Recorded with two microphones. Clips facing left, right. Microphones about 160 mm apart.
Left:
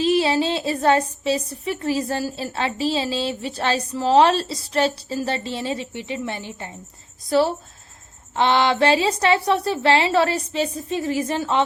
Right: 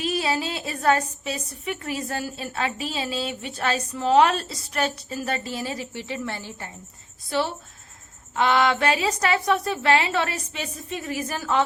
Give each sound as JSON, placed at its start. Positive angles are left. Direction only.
{"t": 0.0, "sound": "a sound", "side_deg": 30}
{"t": 1.2, "sound": "a woman's voice", "side_deg": 30}
{"t": 7.3, "sound": "a woman's voice", "side_deg": 35}